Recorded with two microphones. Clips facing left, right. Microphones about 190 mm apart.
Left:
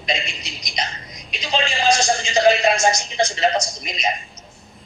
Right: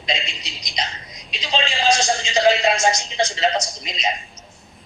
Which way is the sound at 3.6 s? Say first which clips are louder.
Left 1 dB; 25° right (ahead or behind).